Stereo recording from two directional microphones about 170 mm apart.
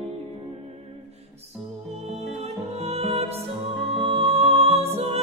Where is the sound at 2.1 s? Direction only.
40° right (ahead or behind).